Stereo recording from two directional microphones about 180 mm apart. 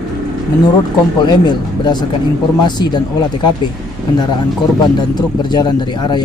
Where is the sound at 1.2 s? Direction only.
25° left (ahead or behind).